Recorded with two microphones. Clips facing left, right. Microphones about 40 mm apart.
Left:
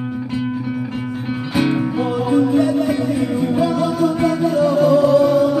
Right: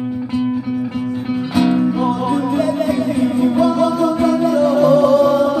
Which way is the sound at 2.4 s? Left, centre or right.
Right.